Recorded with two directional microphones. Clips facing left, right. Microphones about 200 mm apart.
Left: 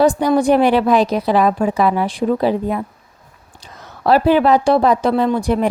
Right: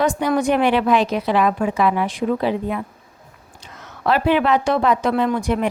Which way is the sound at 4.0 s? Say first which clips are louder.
Left 5 dB; 35° left (ahead or behind).